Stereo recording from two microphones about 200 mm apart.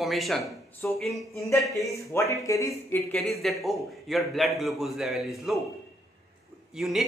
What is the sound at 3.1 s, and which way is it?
A man's voice, centre (ahead or behind).